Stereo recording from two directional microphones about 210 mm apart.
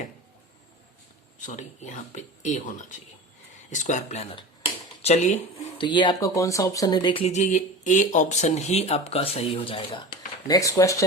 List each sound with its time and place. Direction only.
1.5 s speech: 35° left (ahead or behind)
3.7 s speech: 35° left (ahead or behind)
5.8 s speech: 20° left (ahead or behind)